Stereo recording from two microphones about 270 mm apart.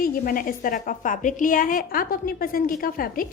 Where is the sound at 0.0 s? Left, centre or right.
Left.